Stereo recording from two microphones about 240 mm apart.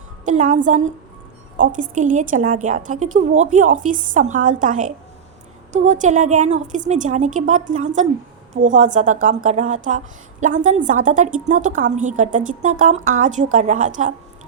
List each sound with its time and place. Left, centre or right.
0.3 s a woman's voice: right